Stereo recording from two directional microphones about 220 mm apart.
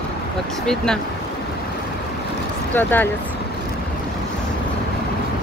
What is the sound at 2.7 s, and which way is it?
Speech, 10° left (ahead or behind).